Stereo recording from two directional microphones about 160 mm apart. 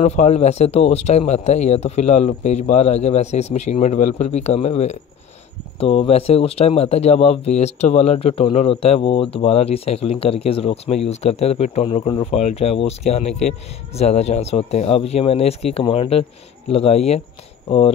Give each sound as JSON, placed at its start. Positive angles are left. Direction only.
{"t": 0.0, "sound": "speech", "side_deg": 45}